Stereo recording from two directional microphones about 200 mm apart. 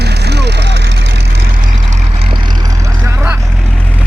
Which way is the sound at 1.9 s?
30° right (ahead or behind).